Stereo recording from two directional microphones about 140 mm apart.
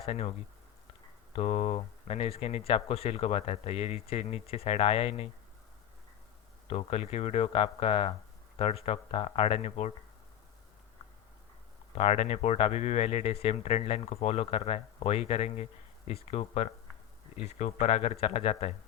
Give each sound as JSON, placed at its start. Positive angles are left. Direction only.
{"t": 0.0, "sound": "speech", "side_deg": 45}
{"t": 6.7, "sound": "speech", "side_deg": 45}
{"t": 11.9, "sound": "speech", "side_deg": 50}